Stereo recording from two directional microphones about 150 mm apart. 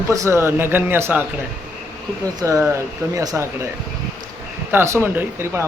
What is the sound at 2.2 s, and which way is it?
Speech, 20° right (ahead or behind).